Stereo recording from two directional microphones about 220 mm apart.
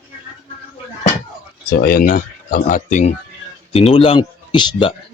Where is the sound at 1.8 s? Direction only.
40° left (ahead or behind).